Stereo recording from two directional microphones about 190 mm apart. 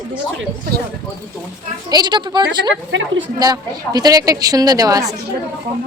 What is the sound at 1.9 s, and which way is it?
A woman's voice, 20° right (ahead or behind).